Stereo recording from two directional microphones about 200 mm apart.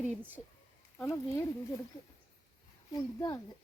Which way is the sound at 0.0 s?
10° right (ahead or behind).